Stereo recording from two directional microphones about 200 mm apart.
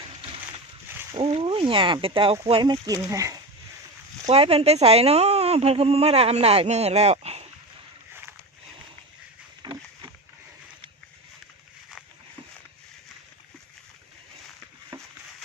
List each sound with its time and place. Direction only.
1.1 s speech: 25° right (ahead or behind)
4.3 s speech: 30° right (ahead or behind)
9.6 s wild animals: 20° right (ahead or behind)